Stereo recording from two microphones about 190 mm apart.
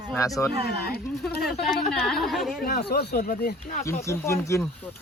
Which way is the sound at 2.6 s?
55° left (ahead or behind).